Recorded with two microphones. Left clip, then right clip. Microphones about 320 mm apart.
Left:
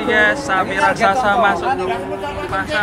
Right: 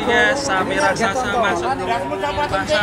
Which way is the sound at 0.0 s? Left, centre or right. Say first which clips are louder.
Left 1 dB; centre.